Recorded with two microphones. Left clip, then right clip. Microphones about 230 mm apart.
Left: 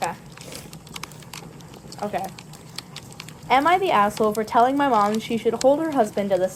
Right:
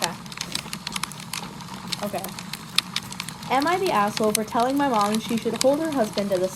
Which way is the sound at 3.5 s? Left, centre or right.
Left.